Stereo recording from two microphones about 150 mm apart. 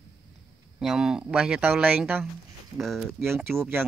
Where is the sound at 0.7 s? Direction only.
5° right (ahead or behind).